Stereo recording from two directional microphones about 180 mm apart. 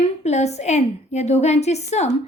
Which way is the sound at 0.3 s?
40° left (ahead or behind).